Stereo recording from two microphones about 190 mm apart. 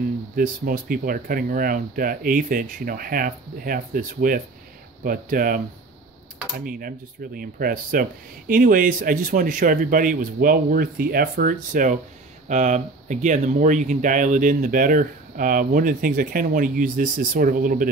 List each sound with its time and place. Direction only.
0.4 s speech: 45° right (ahead or behind)
6.6 s speech: 50° right (ahead or behind)